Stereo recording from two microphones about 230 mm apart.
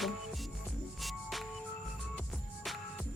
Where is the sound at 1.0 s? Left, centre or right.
Centre.